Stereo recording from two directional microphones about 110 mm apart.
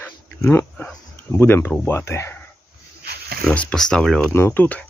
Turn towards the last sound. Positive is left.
turn(degrees=15)  # may be behind; listen again after turning